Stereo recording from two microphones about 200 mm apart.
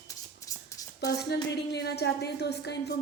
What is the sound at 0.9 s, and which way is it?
A woman's voice, 55° left (ahead or behind).